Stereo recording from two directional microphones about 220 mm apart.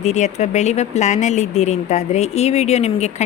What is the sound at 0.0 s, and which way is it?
A woman's voice, 30° left (ahead or behind).